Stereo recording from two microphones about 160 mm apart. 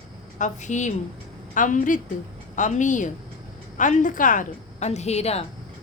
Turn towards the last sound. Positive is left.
turn(degrees=40)  # may be behind; listen again after turning